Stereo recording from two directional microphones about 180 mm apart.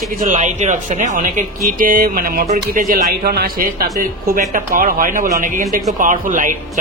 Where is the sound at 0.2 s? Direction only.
45° right (ahead or behind).